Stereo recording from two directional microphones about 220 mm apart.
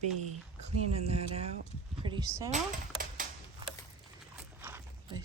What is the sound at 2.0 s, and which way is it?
Speech, 15° right (ahead or behind).